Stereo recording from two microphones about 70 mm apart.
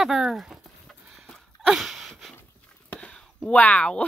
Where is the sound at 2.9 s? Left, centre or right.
Centre.